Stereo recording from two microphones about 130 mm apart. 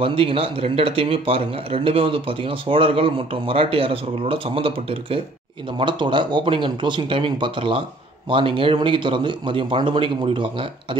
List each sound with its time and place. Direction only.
0.0 s a man's voice: 45° right (ahead or behind)